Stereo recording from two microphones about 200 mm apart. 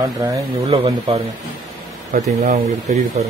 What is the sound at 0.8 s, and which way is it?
Speech, 25° right (ahead or behind).